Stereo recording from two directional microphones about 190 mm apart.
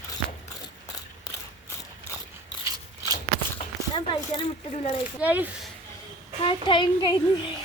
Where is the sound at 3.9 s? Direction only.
25° left (ahead or behind).